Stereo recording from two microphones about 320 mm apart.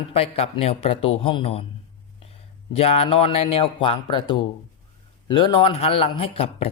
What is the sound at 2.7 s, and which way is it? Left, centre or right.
A man's voice, centre.